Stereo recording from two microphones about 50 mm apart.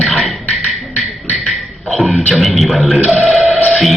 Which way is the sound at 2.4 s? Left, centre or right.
Centre.